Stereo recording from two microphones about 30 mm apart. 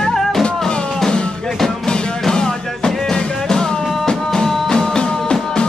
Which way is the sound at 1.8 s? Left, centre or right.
Left.